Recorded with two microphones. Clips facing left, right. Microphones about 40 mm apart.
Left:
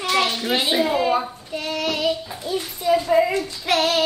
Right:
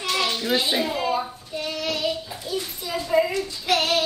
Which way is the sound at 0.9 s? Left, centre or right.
Left.